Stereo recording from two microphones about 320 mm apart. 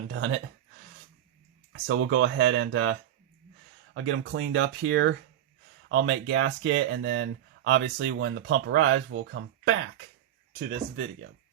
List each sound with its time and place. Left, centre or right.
0.1 s speech: right
1.9 s speech: right